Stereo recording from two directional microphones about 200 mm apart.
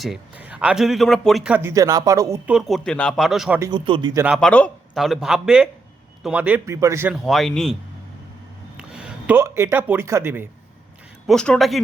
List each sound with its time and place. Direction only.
0.0 s a man's voice: 5° right (ahead or behind)
2.5 s a man's voice: centre (ahead or behind)
3.6 s speech: 25° right (ahead or behind)
4.4 s a man's voice: 5° left (ahead or behind); by 7.2 s 10° right (ahead or behind)
7.3 s a man's voice: centre (ahead or behind)
8.8 s speech: 5° right (ahead or behind)
11.3 s a man's voice: 5° left (ahead or behind)